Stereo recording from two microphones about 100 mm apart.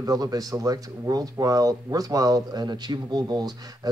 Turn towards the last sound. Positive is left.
turn(degrees=-45)  # may be behind; listen again after turning